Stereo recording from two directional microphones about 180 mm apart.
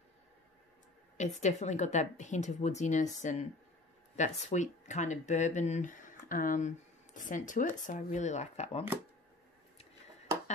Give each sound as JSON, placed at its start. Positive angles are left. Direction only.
{"t": 1.1, "sound": "speech", "side_deg": 40}